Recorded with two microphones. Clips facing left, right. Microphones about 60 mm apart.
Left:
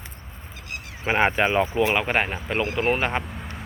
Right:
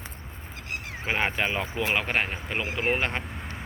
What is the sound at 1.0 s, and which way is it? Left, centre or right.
Speech, left.